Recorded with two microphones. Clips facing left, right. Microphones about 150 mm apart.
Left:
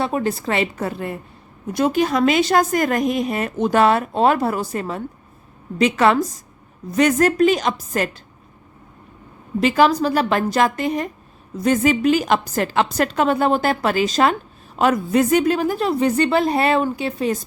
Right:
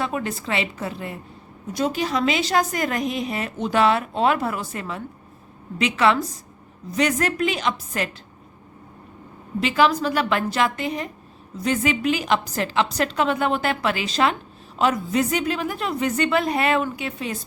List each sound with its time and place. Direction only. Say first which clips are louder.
0.0 s a woman's voice: left 5 dB; 35° left (ahead or behind)
9.6 s a woman's voice: left 4 dB; 45° left (ahead or behind)